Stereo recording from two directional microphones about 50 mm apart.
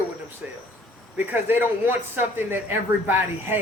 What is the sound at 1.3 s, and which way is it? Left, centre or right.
Speech, right.